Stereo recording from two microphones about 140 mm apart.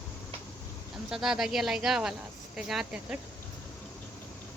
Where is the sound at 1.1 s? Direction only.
5° right (ahead or behind).